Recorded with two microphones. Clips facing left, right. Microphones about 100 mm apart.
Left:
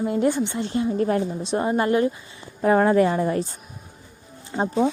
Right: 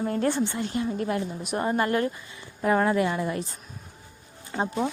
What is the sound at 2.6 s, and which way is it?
Speech, 30° left (ahead or behind).